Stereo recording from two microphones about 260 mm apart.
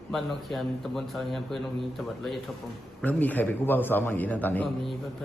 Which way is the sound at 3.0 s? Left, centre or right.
Centre.